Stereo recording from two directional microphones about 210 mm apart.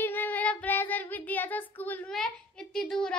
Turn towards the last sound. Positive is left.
turn(degrees=5)  # may be behind; listen again after turning